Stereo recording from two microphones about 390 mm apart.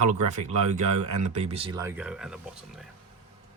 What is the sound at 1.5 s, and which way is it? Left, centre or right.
Speech, centre.